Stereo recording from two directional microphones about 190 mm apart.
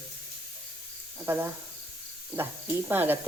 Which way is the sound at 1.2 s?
10° right (ahead or behind).